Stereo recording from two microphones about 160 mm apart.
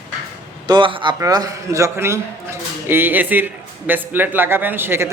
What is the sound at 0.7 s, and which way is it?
A man's voice, 30° right (ahead or behind).